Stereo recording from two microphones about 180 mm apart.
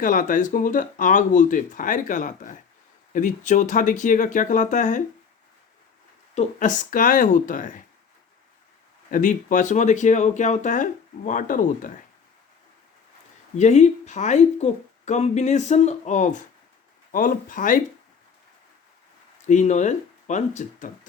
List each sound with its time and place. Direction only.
0.0 s speech: 50° left (ahead or behind)
6.3 s speech: 40° left (ahead or behind)
9.0 s speech: 50° left (ahead or behind)
13.6 s a woman's voice: 40° left (ahead or behind)
19.5 s a woman's voice: 40° left (ahead or behind)